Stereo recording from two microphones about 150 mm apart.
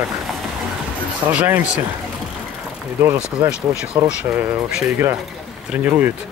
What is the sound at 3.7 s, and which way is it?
Speech, 5° right (ahead or behind).